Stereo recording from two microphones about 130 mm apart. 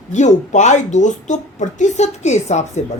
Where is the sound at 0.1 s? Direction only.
65° left (ahead or behind).